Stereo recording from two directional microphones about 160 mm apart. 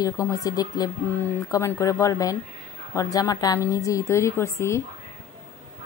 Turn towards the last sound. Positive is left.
turn(degrees=15)  # may be behind; listen again after turning